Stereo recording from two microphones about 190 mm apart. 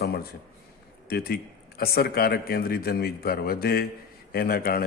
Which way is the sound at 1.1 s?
55° left (ahead or behind).